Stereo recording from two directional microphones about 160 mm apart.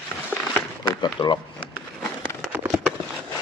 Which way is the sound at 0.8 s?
30° left (ahead or behind).